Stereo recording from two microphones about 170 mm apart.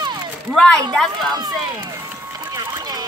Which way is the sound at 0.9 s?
Centre (ahead or behind).